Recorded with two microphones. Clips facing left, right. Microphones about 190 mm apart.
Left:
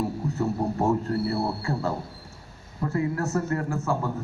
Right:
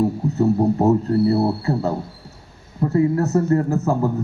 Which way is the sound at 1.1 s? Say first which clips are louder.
Right 9 dB; 35° right (ahead or behind).